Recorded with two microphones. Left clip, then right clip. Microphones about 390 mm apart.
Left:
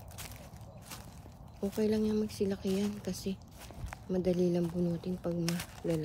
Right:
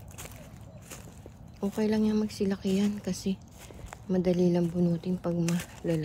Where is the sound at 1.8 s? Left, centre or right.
Centre.